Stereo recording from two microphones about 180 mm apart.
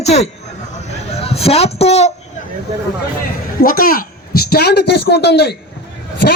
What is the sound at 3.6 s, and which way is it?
A woman's voice, 50° left (ahead or behind).